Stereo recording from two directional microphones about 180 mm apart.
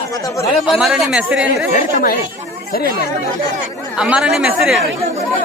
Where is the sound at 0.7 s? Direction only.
Centre (ahead or behind).